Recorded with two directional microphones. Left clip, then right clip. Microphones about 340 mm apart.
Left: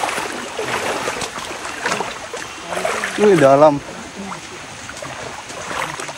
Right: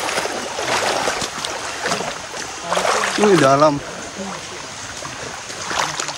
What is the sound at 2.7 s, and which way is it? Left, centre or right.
Rowboat, centre.